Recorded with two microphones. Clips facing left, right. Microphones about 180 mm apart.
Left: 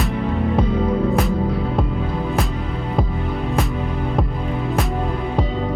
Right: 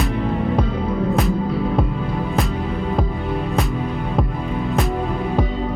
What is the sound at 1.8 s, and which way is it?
Music, centre (ahead or behind).